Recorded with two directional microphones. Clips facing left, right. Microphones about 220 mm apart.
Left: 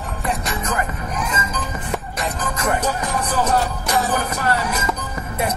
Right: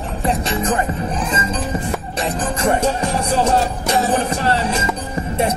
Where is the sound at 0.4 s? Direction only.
30° right (ahead or behind).